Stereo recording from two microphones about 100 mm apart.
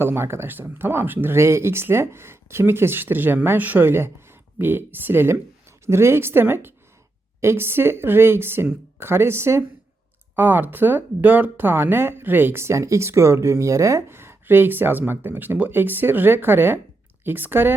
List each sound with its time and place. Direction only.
0.0 s speech: 25° right (ahead or behind)